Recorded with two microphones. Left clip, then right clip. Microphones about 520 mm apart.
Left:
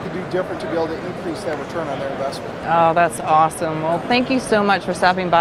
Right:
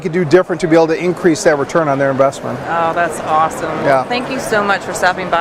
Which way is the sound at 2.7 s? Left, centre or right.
Left.